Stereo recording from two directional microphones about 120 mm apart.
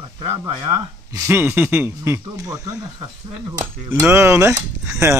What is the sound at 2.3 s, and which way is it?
Speech, 30° right (ahead or behind).